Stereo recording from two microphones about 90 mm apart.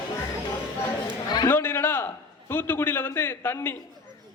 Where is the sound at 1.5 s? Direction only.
25° left (ahead or behind).